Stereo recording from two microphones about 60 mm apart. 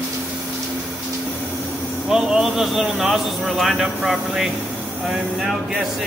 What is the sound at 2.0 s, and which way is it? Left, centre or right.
Speech, centre.